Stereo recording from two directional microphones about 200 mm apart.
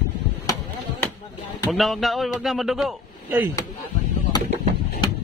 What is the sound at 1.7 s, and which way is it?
A man's voice, centre (ahead or behind).